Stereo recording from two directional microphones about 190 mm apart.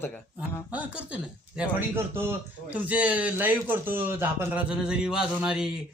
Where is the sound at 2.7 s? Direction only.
10° right (ahead or behind).